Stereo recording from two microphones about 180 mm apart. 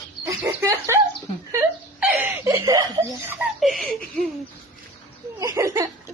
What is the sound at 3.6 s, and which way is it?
Laughter, centre (ahead or behind).